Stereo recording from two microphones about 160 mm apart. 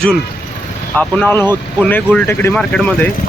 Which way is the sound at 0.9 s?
10° left (ahead or behind).